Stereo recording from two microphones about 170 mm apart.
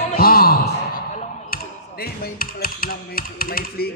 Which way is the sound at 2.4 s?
60° left (ahead or behind).